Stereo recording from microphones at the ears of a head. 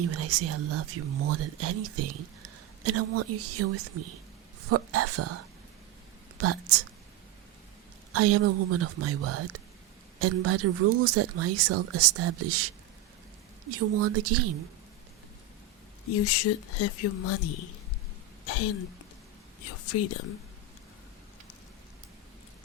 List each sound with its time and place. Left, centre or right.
0.0 s speech: right
8.1 s speech: right
16.0 s a woman's voice: left